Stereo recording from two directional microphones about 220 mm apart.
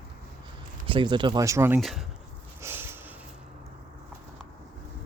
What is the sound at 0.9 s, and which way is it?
Speech, 20° right (ahead or behind).